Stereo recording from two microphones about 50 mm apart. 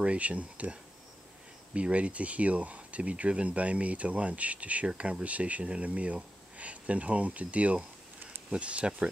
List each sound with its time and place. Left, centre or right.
0.0 s speech: right